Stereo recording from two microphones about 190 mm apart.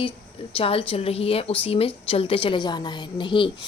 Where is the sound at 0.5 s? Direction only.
30° left (ahead or behind).